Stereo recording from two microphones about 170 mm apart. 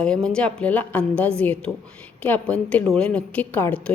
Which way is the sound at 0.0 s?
5° left (ahead or behind).